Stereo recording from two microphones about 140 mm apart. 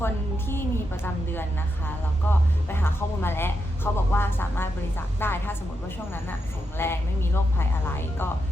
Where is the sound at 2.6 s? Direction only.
15° left (ahead or behind).